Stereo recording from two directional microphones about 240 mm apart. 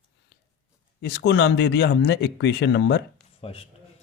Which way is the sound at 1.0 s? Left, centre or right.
Left.